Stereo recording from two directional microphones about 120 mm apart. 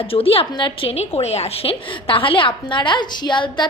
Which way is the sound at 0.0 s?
50° left (ahead or behind).